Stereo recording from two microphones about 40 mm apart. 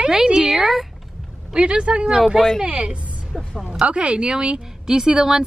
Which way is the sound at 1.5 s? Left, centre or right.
Right.